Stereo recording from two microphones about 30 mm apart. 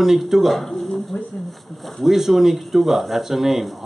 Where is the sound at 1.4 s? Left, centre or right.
Centre.